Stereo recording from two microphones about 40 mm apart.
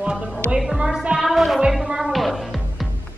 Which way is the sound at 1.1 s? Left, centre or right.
Centre.